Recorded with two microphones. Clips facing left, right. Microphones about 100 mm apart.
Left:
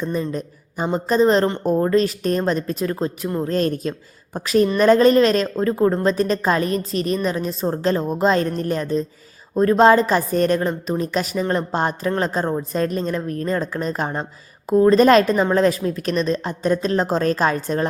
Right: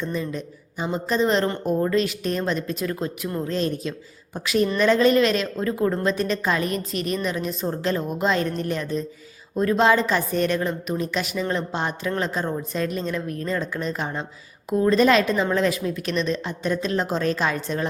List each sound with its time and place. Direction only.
0.1 s a woman's voice: 40° left (ahead or behind)
3.5 s a woman's voice: 45° left (ahead or behind)